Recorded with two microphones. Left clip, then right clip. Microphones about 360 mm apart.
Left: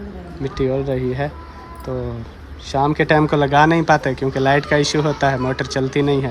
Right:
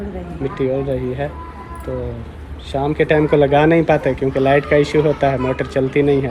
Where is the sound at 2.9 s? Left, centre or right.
Left.